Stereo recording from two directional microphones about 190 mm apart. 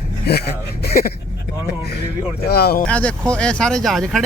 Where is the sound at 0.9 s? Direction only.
55° left (ahead or behind).